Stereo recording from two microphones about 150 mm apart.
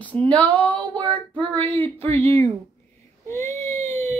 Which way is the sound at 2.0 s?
45° right (ahead or behind).